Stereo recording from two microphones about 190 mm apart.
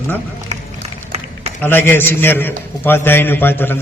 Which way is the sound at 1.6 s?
10° left (ahead or behind).